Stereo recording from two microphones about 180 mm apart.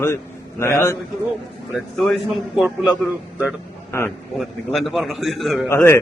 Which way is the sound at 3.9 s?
15° left (ahead or behind).